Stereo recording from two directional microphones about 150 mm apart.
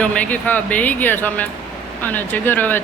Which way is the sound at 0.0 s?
10° left (ahead or behind).